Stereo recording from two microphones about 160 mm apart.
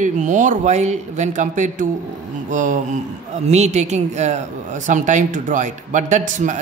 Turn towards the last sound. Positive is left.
turn(degrees=-50)  # may be behind; listen again after turning